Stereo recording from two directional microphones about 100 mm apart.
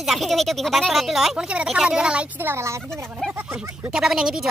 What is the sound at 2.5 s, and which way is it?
Speech, 30° right (ahead or behind).